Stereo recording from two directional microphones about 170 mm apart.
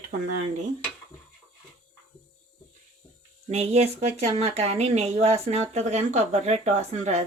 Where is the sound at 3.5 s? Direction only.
35° right (ahead or behind).